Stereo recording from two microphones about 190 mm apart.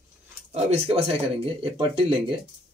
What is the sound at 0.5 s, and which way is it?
Speech, 35° right (ahead or behind).